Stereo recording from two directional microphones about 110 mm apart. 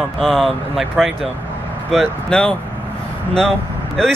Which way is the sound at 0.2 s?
5° left (ahead or behind).